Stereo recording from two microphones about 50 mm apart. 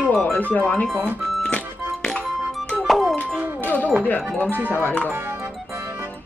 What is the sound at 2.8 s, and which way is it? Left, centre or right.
Music, centre.